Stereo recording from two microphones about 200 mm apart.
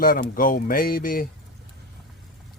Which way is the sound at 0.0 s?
45° left (ahead or behind).